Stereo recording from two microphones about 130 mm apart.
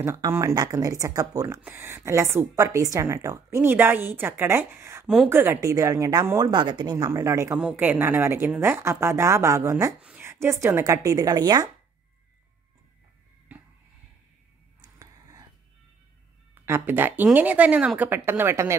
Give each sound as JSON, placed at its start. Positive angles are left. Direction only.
{"t": 0.0, "sound": "a woman's voice", "side_deg": -20}
{"t": 5.0, "sound": "speech", "side_deg": -5}
{"t": 5.3, "sound": "a woman's voice", "side_deg": -20}
{"t": 7.1, "sound": "a woman's voice", "side_deg": -25}
{"t": 7.5, "sound": "a woman's voice", "side_deg": -10}
{"t": 14.8, "sound": "a sound", "side_deg": -30}
{"t": 16.6, "sound": "speech", "side_deg": -15}